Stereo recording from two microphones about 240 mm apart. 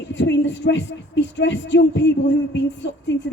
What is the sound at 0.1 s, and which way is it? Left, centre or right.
A woman's voice, left.